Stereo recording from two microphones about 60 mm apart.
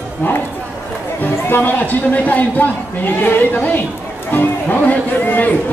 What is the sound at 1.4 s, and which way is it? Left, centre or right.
Speech, left.